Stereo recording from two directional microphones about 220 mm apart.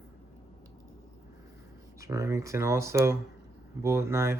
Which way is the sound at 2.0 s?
15° right (ahead or behind).